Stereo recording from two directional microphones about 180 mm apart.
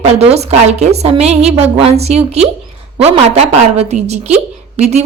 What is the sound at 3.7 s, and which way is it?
Speech, 35° right (ahead or behind).